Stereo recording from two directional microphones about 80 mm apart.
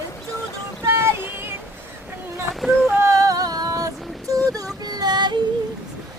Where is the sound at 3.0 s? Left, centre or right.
Right.